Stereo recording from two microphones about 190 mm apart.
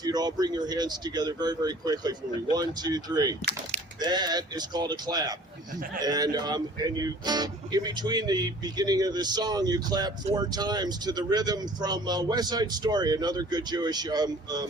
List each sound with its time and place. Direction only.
0.0 s speech: 20° right (ahead or behind)